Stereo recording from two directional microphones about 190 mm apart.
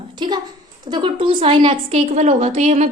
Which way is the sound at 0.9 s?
25° right (ahead or behind).